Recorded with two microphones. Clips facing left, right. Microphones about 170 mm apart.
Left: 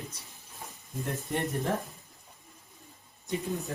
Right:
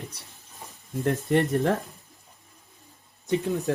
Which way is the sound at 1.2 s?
70° right (ahead or behind).